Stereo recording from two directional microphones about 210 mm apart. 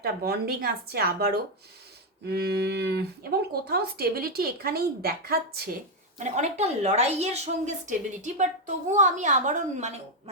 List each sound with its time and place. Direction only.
0.0 s speech: 45° right (ahead or behind)
6.1 s a woman's voice: 35° right (ahead or behind)